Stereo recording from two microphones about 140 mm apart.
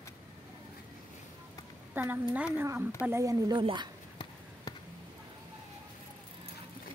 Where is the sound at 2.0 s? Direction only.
15° right (ahead or behind); by 3.9 s 35° right (ahead or behind).